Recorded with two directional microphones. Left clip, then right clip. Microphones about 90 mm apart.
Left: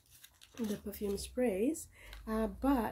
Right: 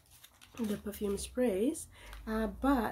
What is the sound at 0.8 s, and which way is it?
Speech, 20° right (ahead or behind).